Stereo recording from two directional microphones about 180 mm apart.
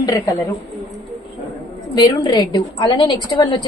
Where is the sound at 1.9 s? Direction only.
25° left (ahead or behind).